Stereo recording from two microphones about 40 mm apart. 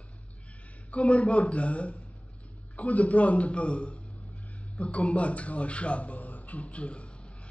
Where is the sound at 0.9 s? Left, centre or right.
Left.